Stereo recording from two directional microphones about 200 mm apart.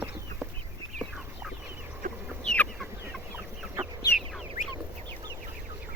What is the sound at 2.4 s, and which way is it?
Chicken, 5° left (ahead or behind).